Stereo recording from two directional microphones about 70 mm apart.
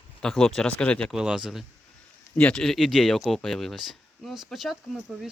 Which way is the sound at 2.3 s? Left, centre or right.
Centre.